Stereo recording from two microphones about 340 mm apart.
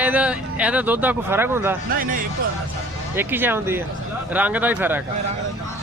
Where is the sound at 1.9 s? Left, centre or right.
Right.